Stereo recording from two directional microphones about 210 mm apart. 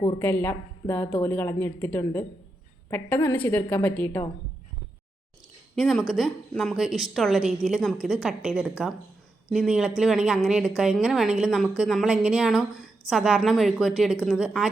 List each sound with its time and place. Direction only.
0.2 s a woman's voice: 10° left (ahead or behind)
5.7 s a woman's voice: centre (ahead or behind)